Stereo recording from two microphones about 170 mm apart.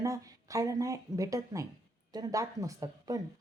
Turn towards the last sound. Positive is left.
turn(degrees=-20)  # may be behind; listen again after turning